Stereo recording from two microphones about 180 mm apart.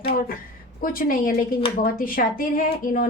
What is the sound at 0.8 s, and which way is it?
A woman's voice, 50° left (ahead or behind).